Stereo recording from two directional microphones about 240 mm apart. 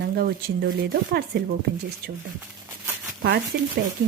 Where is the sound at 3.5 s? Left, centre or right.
Right.